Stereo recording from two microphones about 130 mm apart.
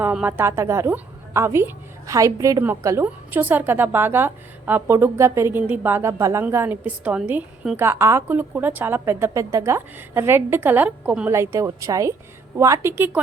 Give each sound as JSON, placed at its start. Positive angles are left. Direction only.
{"t": 0.0, "sound": "a woman's voice", "side_deg": -10}
{"t": 11.3, "sound": "a woman's voice", "side_deg": -20}